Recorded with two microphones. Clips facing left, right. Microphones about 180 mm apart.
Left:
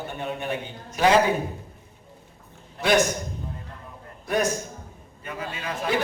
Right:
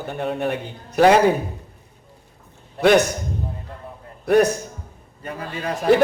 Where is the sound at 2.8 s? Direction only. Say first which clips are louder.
Right 6 dB; 65° right (ahead or behind).